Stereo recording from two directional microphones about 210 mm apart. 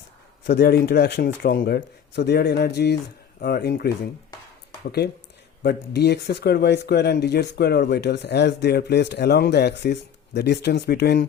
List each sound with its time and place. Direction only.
0.4 s speech: 45° left (ahead or behind)
5.6 s speech: 50° left (ahead or behind)